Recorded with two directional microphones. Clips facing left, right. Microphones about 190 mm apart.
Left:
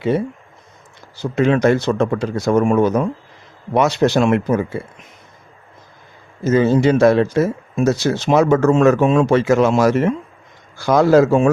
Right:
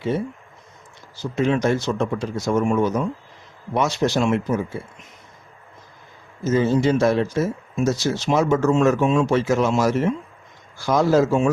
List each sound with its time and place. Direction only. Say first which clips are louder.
1.1 s speech: left 5 dB; 65° left (ahead or behind)
6.4 s a man's voice: left 4 dB; 65° left (ahead or behind)